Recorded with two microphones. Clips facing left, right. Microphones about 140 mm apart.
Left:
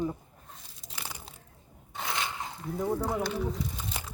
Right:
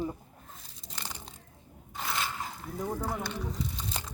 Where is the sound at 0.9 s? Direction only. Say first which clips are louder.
Even; 10° left (ahead or behind).